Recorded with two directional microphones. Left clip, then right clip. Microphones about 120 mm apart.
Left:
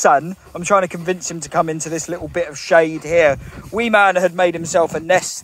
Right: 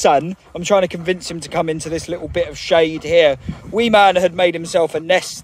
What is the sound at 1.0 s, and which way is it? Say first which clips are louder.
Speech: right 1 dB; 30° right (ahead or behind).